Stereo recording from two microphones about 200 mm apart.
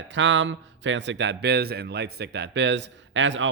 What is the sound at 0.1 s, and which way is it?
Speech, 65° right (ahead or behind).